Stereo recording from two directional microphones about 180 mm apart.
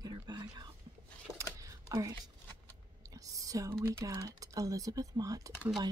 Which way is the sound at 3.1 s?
20° right (ahead or behind).